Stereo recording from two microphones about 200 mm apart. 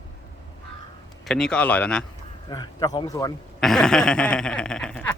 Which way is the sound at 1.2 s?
5° left (ahead or behind).